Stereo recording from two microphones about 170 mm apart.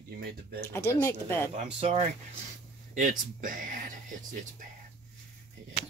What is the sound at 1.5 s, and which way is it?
Speech, 40° right (ahead or behind).